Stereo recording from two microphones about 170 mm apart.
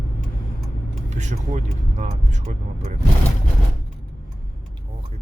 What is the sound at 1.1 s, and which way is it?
Speech, 45° right (ahead or behind).